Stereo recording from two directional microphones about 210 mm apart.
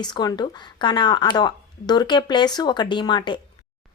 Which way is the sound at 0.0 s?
20° left (ahead or behind).